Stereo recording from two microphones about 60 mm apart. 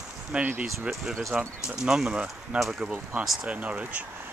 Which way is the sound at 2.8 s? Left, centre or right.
Right.